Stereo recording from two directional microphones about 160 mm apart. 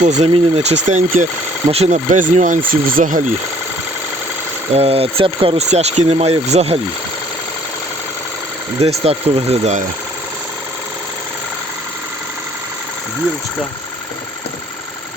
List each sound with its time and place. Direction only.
0.0 s speech: 45° right (ahead or behind)
4.7 s speech: 40° right (ahead or behind)
8.8 s speech: 40° right (ahead or behind)